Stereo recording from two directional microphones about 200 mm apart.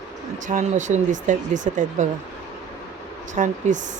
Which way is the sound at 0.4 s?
40° right (ahead or behind).